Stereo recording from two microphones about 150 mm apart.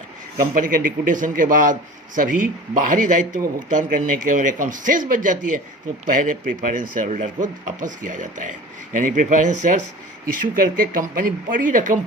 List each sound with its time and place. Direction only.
0.5 s speech: 65° right (ahead or behind)
10.5 s speech: 70° right (ahead or behind)